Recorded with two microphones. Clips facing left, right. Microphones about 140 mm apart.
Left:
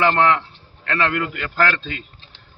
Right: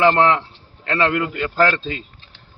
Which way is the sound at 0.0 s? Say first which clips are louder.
Right 2 dB; 25° right (ahead or behind).